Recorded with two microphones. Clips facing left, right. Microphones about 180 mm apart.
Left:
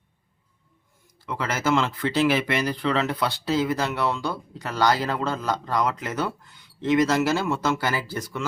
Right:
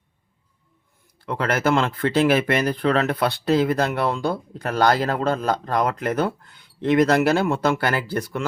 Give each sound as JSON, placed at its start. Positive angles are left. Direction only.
{"t": 1.2, "sound": "speech", "side_deg": -60}